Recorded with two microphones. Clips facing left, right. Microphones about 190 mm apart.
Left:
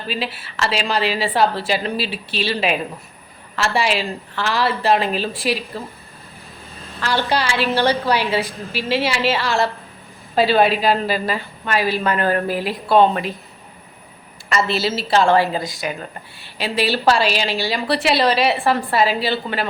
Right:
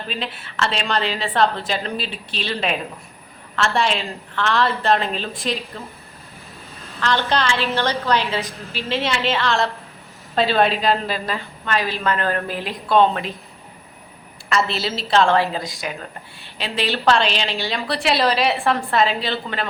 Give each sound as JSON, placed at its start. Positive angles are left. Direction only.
{"t": 0.1, "sound": "a woman's voice", "side_deg": 5}
{"t": 7.3, "sound": "a woman's voice", "side_deg": 10}
{"t": 14.5, "sound": "a woman's voice", "side_deg": 0}